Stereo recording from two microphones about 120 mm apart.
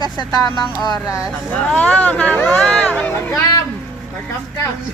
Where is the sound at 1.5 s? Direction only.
10° left (ahead or behind).